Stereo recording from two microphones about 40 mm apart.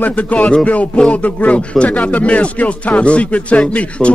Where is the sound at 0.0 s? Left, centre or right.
Left.